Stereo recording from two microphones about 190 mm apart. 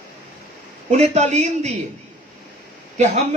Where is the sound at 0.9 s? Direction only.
40° right (ahead or behind).